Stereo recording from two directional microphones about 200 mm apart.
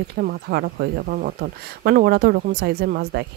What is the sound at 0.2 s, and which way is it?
Speech, 50° right (ahead or behind).